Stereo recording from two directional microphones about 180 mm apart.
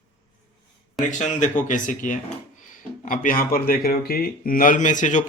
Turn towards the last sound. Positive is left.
turn(degrees=45)  # may be behind; listen again after turning